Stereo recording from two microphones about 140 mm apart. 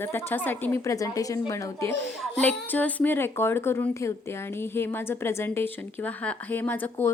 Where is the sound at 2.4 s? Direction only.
10° left (ahead or behind).